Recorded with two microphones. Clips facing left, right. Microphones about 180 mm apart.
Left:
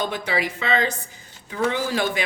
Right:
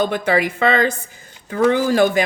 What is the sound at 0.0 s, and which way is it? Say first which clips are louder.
A woman's voice: right 7 dB; 55° right (ahead or behind).